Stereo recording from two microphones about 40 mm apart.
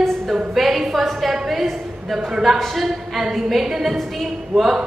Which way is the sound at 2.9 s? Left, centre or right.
Centre.